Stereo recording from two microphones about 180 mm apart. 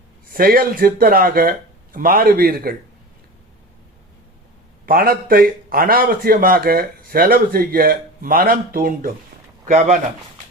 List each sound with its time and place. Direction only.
0.3 s a man's voice: 55° right (ahead or behind)
4.9 s a man's voice: 55° right (ahead or behind)